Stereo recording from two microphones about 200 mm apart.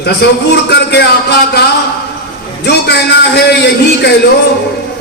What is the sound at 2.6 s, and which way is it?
Speech, 55° left (ahead or behind).